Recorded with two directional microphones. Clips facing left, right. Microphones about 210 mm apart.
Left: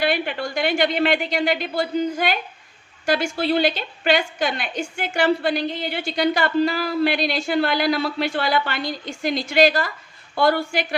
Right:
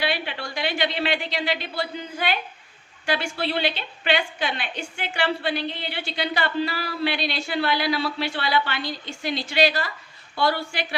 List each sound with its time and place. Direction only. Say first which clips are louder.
0.0 s a woman's voice: left 5 dB; 45° left (ahead or behind)